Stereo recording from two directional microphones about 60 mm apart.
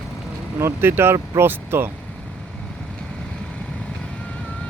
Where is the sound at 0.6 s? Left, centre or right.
Right.